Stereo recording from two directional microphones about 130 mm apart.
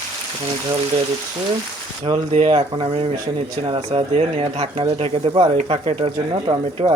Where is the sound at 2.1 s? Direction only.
40° right (ahead or behind).